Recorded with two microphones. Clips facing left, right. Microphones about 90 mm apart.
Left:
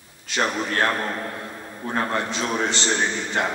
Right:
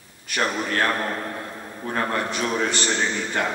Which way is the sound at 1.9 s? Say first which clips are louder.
Even; 25° left (ahead or behind).